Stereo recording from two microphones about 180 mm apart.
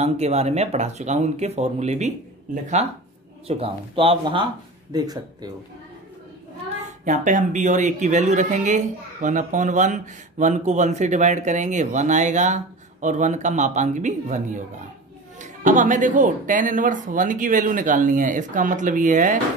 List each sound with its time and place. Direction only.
0.0 s a woman's voice: 35° right (ahead or behind)
7.1 s a woman's voice: 45° right (ahead or behind)